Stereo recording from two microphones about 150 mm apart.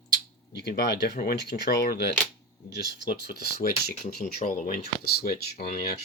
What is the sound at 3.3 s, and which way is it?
Speech, 90° left.